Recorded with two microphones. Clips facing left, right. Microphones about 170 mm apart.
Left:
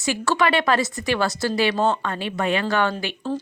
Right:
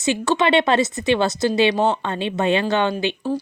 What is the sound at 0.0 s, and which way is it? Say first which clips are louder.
A woman's voice: right 2 dB; 20° right (ahead or behind).